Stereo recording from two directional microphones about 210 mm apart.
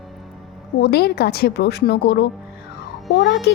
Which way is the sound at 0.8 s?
50° left (ahead or behind).